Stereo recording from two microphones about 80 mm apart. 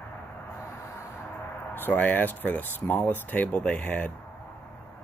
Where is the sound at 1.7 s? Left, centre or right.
Left.